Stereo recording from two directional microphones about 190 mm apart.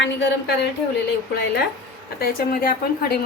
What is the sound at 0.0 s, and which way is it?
Speech, 70° left (ahead or behind).